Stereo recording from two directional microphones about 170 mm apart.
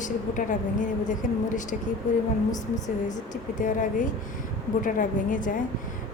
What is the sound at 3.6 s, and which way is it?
A woman's voice, 50° left (ahead or behind).